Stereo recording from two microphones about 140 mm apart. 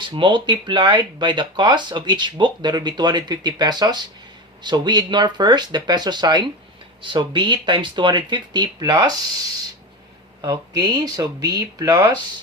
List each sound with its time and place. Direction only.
0.0 s speech: 35° right (ahead or behind)
10.4 s speech: 25° right (ahead or behind)